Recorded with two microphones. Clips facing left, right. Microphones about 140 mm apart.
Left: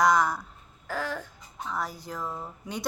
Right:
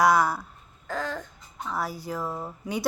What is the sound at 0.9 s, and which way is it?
Child singing, 10° left (ahead or behind).